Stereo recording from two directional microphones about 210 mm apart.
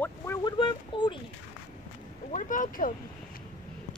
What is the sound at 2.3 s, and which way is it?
Speech, 40° left (ahead or behind).